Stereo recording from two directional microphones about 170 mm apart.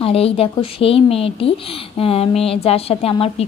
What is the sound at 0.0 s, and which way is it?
A woman's voice, 35° left (ahead or behind).